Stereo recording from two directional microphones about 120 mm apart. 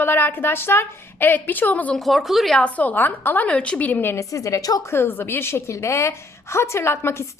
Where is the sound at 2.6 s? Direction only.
15° left (ahead or behind).